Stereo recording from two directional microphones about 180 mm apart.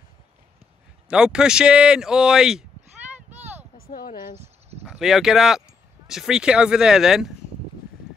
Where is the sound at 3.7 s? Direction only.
55° left (ahead or behind).